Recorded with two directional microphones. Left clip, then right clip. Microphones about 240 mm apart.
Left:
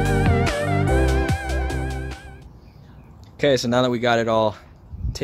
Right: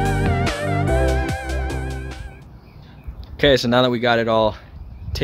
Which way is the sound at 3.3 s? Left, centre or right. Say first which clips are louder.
Right 3 dB; centre.